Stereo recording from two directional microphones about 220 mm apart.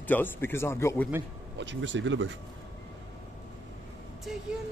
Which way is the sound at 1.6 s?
55° right (ahead or behind).